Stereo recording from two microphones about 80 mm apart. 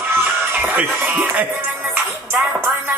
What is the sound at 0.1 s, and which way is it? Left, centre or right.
Music, right.